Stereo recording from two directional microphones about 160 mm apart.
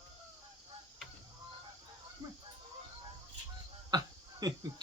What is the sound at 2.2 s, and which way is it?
Fowl, 25° right (ahead or behind).